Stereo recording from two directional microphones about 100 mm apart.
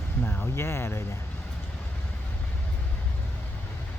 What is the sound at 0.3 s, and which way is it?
Speech, 25° left (ahead or behind).